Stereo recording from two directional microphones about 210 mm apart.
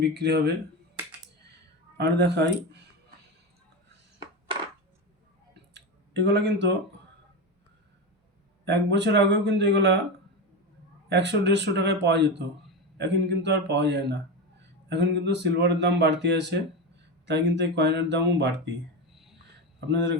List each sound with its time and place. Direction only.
0.0 s a man's voice: 50° right (ahead or behind)
2.0 s a man's voice: 55° right (ahead or behind)
5.7 s a sound: 55° right (ahead or behind)
8.6 s speech: 55° right (ahead or behind)
11.1 s a man's voice: 55° right (ahead or behind)